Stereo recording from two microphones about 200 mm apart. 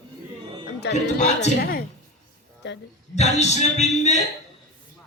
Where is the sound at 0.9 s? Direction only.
35° left (ahead or behind).